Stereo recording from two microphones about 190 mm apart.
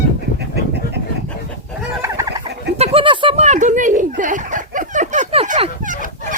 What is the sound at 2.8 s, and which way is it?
Snicker, 30° right (ahead or behind).